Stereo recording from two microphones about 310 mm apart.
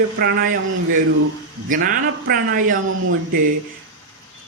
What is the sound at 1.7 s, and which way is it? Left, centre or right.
Speech, right.